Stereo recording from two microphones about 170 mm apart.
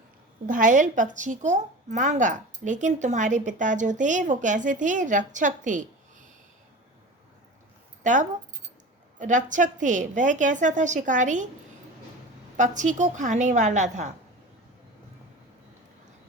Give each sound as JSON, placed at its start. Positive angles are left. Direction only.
{"t": 0.4, "sound": "a woman's voice", "side_deg": -50}
{"t": 8.0, "sound": "a woman's voice", "side_deg": -45}
{"t": 12.5, "sound": "a woman's voice", "side_deg": -45}